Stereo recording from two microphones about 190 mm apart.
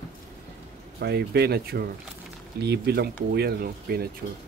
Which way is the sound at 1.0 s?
60° right (ahead or behind).